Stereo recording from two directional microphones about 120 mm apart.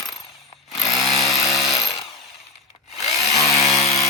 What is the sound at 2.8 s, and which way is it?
Wood, 65° left (ahead or behind).